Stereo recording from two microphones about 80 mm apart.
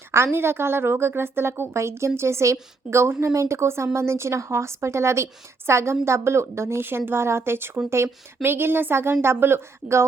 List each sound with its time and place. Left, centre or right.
0.1 s a woman's voice: right